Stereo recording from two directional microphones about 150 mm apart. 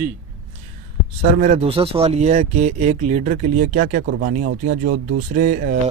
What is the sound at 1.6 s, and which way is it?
Speech, 40° right (ahead or behind).